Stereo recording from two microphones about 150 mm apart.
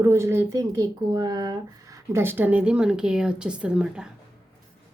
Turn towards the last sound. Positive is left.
turn(degrees=-5)  # may be behind; listen again after turning